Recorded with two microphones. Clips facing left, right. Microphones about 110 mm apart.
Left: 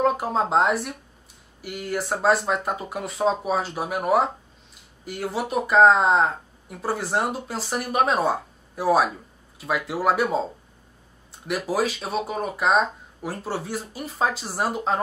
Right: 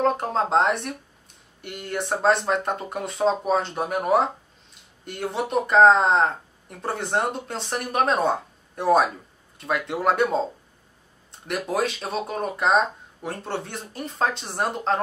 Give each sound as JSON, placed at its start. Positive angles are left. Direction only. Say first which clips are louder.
{"t": 0.0, "sound": "speech", "louder": "even", "side_deg": 5}